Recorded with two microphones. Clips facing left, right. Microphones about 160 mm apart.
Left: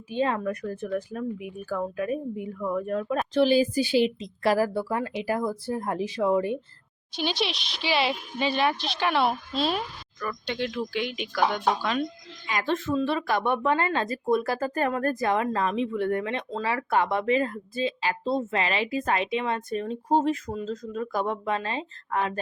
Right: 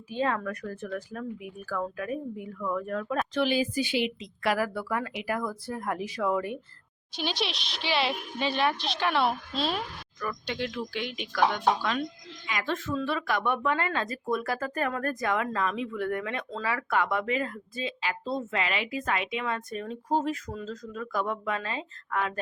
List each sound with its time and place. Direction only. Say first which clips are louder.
0.1 s speech: left 3 dB; 20° left (ahead or behind)
3.4 s speech: left 7 dB; 35° left (ahead or behind)
7.1 s speech: left 3 dB; centre (ahead or behind)
12.5 s speech: left 4 dB; 30° left (ahead or behind)